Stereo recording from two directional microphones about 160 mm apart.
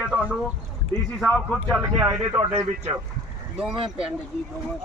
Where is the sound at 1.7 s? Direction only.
20° right (ahead or behind).